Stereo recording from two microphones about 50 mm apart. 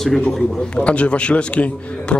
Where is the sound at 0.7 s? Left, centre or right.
Left.